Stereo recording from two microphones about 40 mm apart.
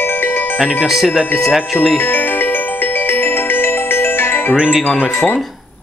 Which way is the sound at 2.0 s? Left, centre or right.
Left.